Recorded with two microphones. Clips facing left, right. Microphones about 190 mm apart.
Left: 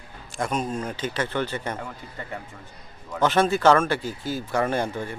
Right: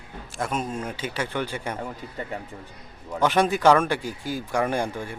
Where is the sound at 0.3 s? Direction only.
5° right (ahead or behind).